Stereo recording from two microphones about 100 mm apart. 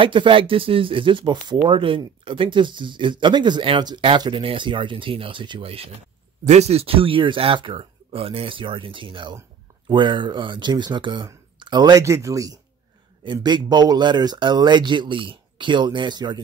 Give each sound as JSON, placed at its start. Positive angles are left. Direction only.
{"t": 0.0, "sound": "speech", "side_deg": -60}
{"t": 6.6, "sound": "speech", "side_deg": -90}
{"t": 12.0, "sound": "speech", "side_deg": -30}
{"t": 13.2, "sound": "speech", "side_deg": -50}